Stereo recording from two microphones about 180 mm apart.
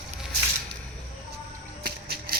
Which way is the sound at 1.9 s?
60° right (ahead or behind).